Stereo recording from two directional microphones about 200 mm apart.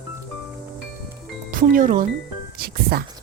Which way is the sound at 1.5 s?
40° right (ahead or behind).